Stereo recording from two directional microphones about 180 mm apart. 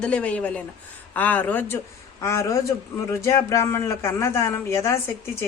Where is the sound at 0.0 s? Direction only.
5° left (ahead or behind).